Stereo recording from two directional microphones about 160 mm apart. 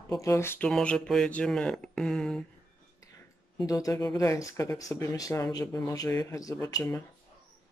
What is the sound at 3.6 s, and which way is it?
Speech, 20° left (ahead or behind).